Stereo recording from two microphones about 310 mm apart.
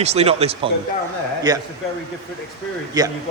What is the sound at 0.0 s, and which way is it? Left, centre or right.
A man's voice, centre.